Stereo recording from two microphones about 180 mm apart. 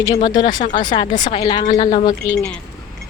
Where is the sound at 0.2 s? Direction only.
25° left (ahead or behind).